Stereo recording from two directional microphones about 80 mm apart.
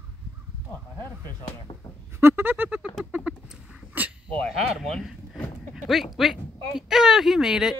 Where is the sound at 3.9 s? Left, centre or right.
Centre.